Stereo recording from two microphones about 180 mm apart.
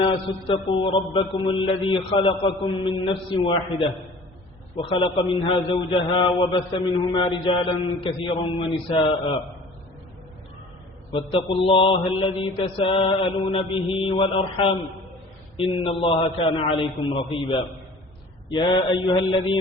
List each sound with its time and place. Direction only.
0.0 s a man's voice: 30° left (ahead or behind)
11.5 s a man's voice: 30° left (ahead or behind)